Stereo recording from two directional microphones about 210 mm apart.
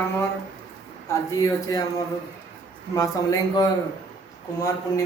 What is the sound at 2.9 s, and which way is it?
Speech, 15° left (ahead or behind).